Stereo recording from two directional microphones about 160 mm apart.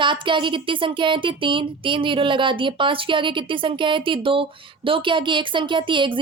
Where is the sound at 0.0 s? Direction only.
30° right (ahead or behind).